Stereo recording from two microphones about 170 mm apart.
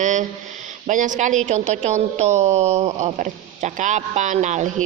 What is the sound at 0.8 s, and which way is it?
A woman's voice, 50° right (ahead or behind).